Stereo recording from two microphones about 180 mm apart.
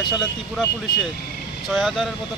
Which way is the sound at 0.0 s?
25° left (ahead or behind).